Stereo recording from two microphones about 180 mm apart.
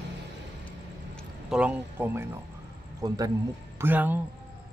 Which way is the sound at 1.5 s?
5° right (ahead or behind).